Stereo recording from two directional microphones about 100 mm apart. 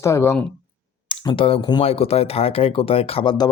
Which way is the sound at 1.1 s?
60° left (ahead or behind).